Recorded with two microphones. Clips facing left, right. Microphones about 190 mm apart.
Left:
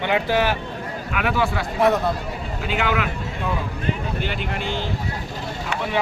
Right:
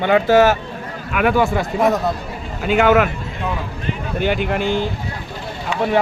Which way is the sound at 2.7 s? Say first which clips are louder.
Right 10 dB; 50° right (ahead or behind).